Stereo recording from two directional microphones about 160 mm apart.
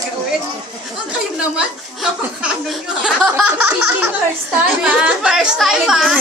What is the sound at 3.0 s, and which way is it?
Speech, 5° right (ahead or behind).